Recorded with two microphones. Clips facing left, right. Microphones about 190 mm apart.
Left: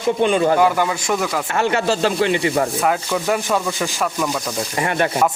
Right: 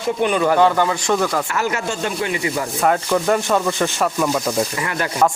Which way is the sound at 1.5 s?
30° left (ahead or behind).